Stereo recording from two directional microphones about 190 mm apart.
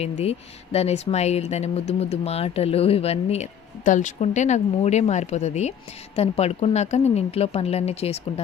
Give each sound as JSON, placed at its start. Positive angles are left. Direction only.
{"t": 0.0, "sound": "speech", "side_deg": 35}